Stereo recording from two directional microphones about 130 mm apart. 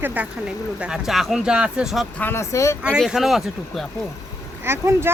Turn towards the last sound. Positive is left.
turn(degrees=-20)  # may be behind; listen again after turning